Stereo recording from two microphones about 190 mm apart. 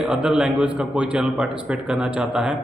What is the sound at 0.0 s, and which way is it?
A man's voice, 5° right (ahead or behind).